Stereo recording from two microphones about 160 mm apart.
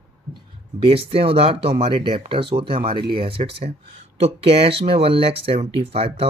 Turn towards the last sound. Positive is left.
turn(degrees=-40)  # may be behind; listen again after turning